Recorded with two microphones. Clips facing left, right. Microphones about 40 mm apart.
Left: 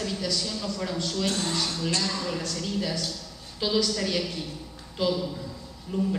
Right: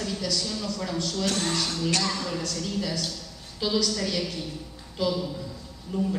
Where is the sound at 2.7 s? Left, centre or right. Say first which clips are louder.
Even; left.